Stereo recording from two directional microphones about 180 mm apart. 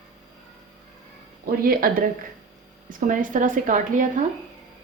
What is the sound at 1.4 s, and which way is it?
A woman's voice, 50° right (ahead or behind).